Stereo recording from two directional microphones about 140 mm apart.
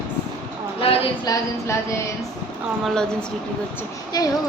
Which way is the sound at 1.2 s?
25° left (ahead or behind).